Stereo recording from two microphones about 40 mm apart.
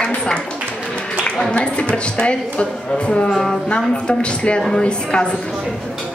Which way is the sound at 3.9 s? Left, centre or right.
Left.